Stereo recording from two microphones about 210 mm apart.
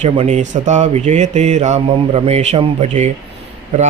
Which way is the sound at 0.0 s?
35° right (ahead or behind).